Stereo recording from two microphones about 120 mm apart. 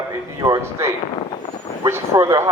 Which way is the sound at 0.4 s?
25° right (ahead or behind).